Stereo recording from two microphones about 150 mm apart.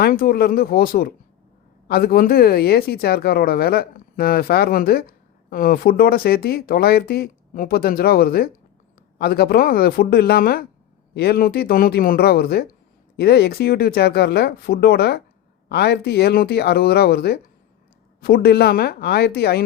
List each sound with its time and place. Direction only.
0.0 s speech: 85° left